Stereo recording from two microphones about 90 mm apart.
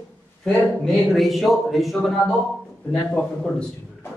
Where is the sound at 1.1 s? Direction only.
Centre (ahead or behind).